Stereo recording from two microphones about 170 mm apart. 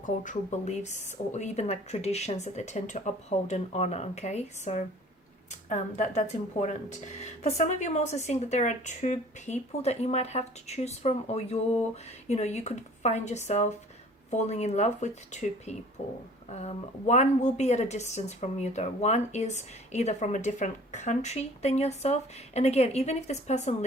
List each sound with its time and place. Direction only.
0.0 s a woman's voice: 50° left (ahead or behind)